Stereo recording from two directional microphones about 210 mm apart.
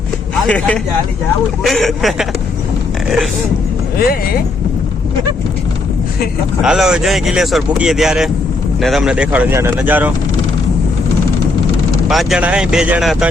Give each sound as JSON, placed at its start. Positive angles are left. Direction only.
{"t": 0.4, "sound": "speech", "side_deg": 5}
{"t": 3.9, "sound": "speech", "side_deg": 45}
{"t": 6.6, "sound": "speech", "side_deg": 0}
{"t": 12.0, "sound": "speech", "side_deg": 0}